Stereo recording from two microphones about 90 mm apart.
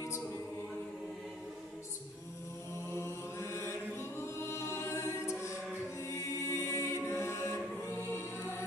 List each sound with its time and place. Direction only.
2.9 s mantra: 30° left (ahead or behind)
4.4 s music: 30° left (ahead or behind)
5.9 s a capella: 30° left (ahead or behind)